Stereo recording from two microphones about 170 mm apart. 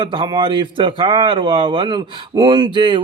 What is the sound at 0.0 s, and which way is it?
Speech, 30° right (ahead or behind).